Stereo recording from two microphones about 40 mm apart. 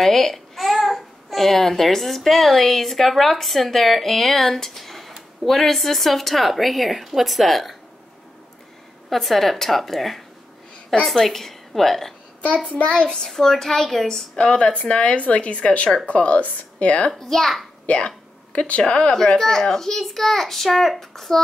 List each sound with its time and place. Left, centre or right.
0.0 s a child's voice: centre
9.1 s a woman's voice: centre
12.7 s a woman's voice: left
13.1 s a woman's voice: centre; by 17.1 s left
17.1 s a woman's voice: centre
17.8 s speech: left
19.1 s a child's voice: centre